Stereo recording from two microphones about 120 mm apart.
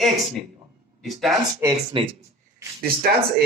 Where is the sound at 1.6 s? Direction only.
25° right (ahead or behind).